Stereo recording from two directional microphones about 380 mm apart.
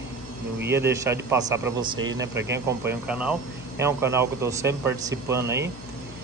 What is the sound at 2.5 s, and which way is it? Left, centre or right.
Speech, centre.